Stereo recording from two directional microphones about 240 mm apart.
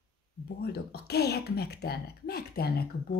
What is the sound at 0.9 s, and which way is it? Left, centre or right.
Speech, left.